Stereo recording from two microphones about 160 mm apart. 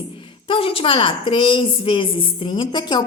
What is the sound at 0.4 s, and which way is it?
A woman's voice, 35° left (ahead or behind).